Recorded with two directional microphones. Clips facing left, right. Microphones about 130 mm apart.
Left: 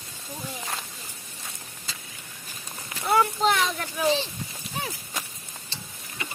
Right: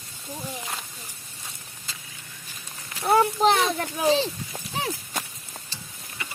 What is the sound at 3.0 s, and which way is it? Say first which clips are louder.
Speech: right 3 dB; 30° right (ahead or behind).